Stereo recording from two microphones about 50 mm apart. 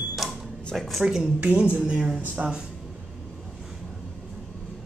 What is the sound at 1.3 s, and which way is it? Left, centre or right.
Speech, right.